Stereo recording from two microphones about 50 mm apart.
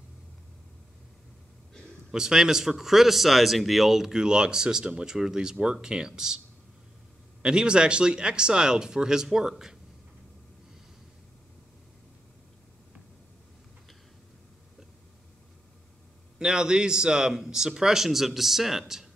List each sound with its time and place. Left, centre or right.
2.1 s speech: centre
7.4 s speech: centre
16.3 s speech: centre